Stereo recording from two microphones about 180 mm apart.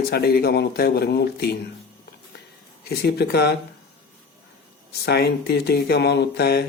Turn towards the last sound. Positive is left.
turn(degrees=65)  # may be behind; listen again after turning